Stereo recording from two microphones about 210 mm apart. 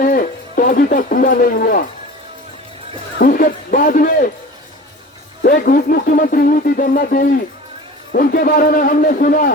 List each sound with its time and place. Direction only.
0.0 s speech: 40° left (ahead or behind)
3.2 s a man's voice: 40° left (ahead or behind)
5.4 s a man's voice: 45° left (ahead or behind)